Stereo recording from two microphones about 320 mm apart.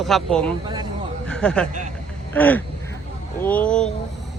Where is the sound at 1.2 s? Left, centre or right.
Centre.